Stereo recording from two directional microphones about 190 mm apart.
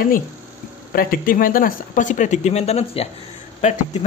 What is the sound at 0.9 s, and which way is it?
Speech, 50° left (ahead or behind).